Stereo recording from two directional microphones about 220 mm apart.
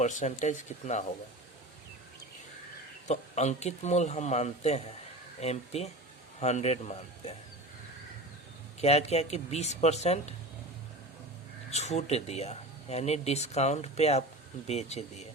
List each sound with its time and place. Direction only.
0.0 s speech: 35° left (ahead or behind)
3.1 s speech: 30° left (ahead or behind)
8.8 s speech: 30° left (ahead or behind)
11.7 s speech: 30° left (ahead or behind)